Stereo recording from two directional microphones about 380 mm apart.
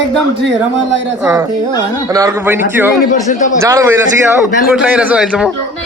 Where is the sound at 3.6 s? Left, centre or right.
Centre.